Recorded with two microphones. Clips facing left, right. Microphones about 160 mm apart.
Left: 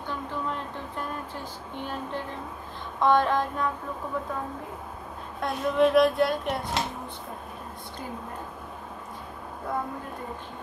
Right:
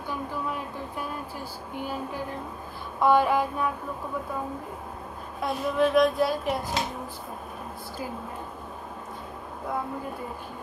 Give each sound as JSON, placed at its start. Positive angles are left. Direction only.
{"t": 0.1, "sound": "a sound", "side_deg": -10}
{"t": 1.8, "sound": "music", "side_deg": -10}
{"t": 5.4, "sound": "speech", "side_deg": 0}